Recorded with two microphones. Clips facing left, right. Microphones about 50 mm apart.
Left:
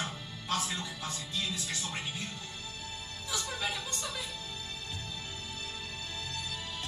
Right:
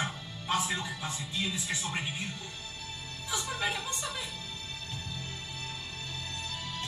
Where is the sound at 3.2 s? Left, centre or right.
Centre.